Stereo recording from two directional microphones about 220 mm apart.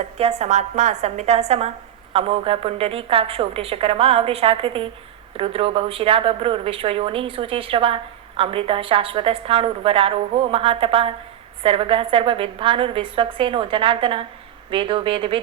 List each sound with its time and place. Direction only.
0.2 s speech: 25° right (ahead or behind)